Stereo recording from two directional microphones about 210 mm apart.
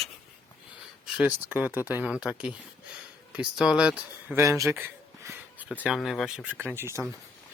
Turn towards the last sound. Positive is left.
turn(degrees=-10)  # may be behind; listen again after turning